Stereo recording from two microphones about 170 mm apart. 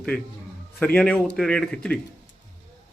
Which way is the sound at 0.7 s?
5° left (ahead or behind).